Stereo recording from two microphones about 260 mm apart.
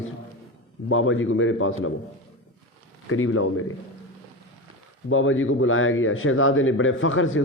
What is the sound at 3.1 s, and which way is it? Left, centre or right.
Speech, left.